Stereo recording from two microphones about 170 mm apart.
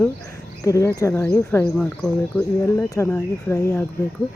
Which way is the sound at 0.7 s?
15° left (ahead or behind).